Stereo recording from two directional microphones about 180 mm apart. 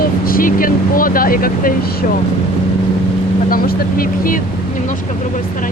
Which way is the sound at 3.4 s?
55° left (ahead or behind).